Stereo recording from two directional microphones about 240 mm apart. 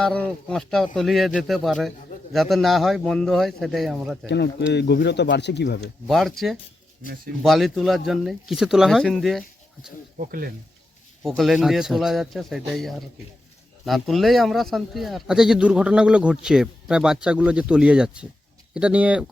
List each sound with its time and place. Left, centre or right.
0.0 s speech: centre
4.7 s speech: left
6.1 s speech: centre
10.2 s speech: right
11.2 s speech: centre